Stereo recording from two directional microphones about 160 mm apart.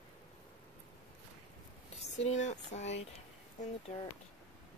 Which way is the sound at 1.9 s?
45° left (ahead or behind).